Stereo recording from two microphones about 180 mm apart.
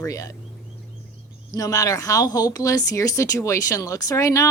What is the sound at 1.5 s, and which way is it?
Speech, 20° left (ahead or behind).